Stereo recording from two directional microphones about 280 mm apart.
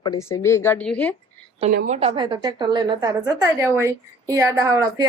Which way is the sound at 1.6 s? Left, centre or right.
Right.